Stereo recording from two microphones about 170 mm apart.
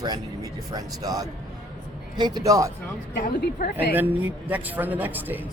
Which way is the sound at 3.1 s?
70° left (ahead or behind).